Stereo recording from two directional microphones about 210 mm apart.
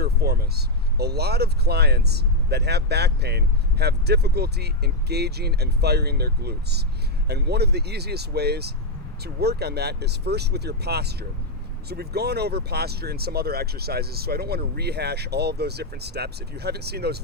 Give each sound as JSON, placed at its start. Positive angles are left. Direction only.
{"t": 0.0, "sound": "speech", "side_deg": -50}